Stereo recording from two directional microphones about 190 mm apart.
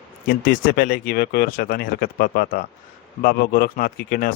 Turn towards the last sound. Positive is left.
turn(degrees=50)  # may be behind; listen again after turning